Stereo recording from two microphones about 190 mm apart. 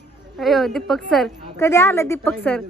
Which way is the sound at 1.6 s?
15° left (ahead or behind).